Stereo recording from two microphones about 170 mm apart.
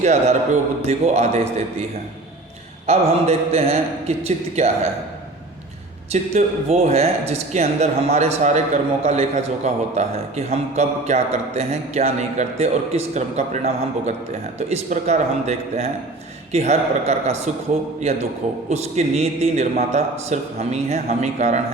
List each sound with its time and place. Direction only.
0.0 s speech: 40° right (ahead or behind)
2.8 s speech: 40° right (ahead or behind)
6.1 s speech: 40° right (ahead or behind)
14.7 s speech: 40° right (ahead or behind)